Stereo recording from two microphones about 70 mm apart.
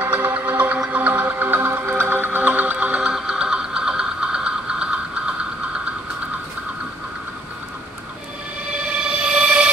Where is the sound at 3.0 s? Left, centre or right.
Centre.